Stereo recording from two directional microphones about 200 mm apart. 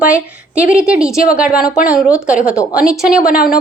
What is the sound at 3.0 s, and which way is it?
Speech, 45° left (ahead or behind).